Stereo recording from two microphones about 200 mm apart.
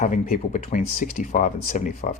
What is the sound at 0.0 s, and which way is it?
Speech, 40° left (ahead or behind).